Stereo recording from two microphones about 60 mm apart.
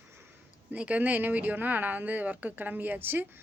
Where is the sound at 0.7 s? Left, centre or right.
Right.